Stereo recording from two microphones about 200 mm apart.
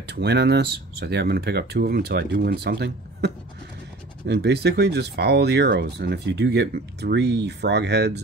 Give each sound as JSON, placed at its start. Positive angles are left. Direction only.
{"t": 0.0, "sound": "speech", "side_deg": -55}
{"t": 4.3, "sound": "speech", "side_deg": -55}